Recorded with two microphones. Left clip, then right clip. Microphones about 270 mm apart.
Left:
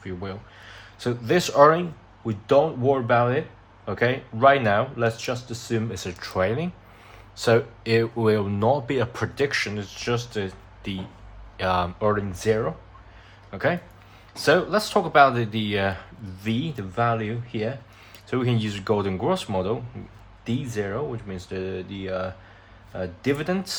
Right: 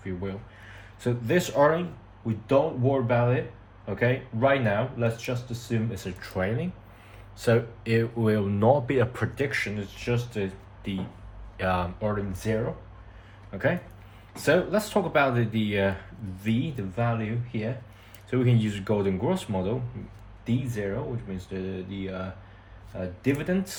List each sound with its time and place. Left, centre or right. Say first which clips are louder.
0.0 s a sound: left 1 dB; centre
0.9 s speech: left 3 dB; centre
11.9 s speech: left 6 dB; left
13.5 s speech: left 3 dB; centre
18.3 s speech: left 1 dB; centre
21.3 s speech: left 4 dB; left